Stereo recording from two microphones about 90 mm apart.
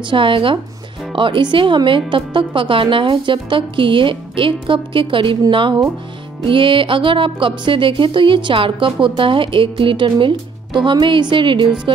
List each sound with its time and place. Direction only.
0.1 s speech: 70° right (ahead or behind)